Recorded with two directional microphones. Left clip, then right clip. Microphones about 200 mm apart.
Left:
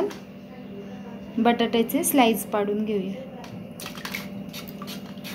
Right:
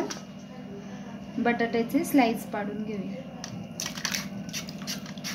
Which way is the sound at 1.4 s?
30° left (ahead or behind).